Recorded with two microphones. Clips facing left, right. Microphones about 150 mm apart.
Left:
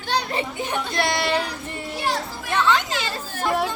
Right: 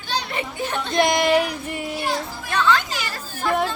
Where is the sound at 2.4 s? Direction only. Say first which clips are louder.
Even; 20° left (ahead or behind).